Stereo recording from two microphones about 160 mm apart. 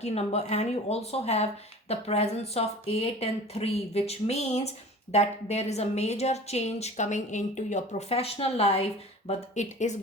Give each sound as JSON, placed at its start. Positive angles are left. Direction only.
{"t": 0.0, "sound": "a woman's voice", "side_deg": 40}